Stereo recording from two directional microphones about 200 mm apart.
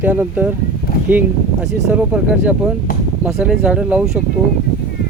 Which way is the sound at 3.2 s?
5° right (ahead or behind).